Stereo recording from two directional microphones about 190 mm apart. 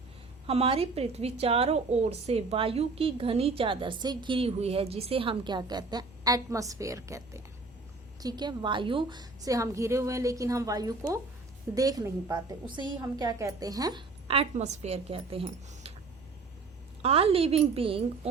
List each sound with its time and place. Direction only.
0.4 s a woman's voice: 30° right (ahead or behind)
17.0 s a woman's voice: 30° right (ahead or behind)